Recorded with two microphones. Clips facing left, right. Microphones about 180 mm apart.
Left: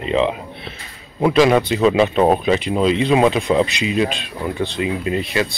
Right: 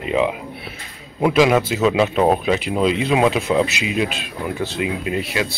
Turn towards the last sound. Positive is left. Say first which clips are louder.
# left 2 dB
turn(degrees=-5)  # may be behind; listen again after turning